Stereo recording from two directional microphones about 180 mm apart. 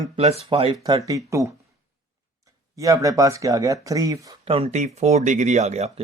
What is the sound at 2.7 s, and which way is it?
Speech, 20° right (ahead or behind).